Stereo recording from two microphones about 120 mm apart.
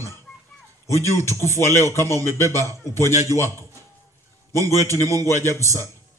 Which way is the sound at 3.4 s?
25° right (ahead or behind).